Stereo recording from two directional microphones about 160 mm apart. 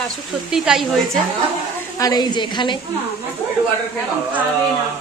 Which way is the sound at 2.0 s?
25° left (ahead or behind).